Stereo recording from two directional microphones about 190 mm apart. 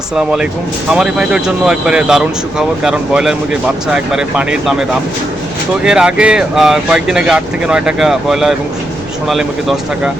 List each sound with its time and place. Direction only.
0.2 s speech: 5° right (ahead or behind)